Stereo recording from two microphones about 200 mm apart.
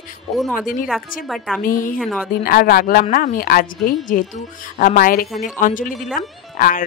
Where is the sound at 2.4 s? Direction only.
45° left (ahead or behind).